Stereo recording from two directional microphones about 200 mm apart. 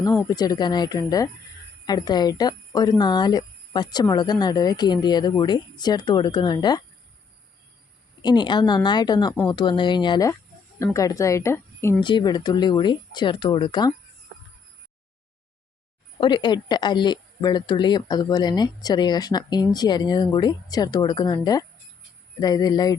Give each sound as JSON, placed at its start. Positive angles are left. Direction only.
{"t": 0.3, "sound": "a woman's voice", "side_deg": 20}
{"t": 8.2, "sound": "a woman's voice", "side_deg": 20}
{"t": 11.9, "sound": "a woman's voice", "side_deg": 25}
{"t": 16.2, "sound": "a woman's voice", "side_deg": 20}